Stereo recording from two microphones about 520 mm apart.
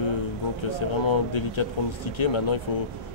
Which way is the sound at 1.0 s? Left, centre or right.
Left.